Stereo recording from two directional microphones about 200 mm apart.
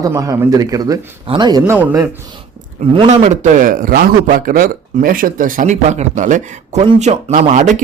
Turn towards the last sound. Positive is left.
turn(degrees=-35)  # may be behind; listen again after turning